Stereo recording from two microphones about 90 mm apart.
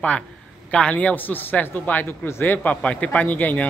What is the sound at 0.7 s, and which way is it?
A man's voice, 10° left (ahead or behind).